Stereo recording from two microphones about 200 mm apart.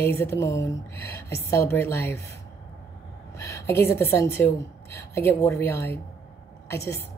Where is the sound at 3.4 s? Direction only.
15° left (ahead or behind).